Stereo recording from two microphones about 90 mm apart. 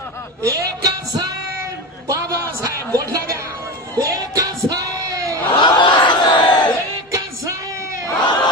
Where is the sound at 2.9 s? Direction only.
40° right (ahead or behind).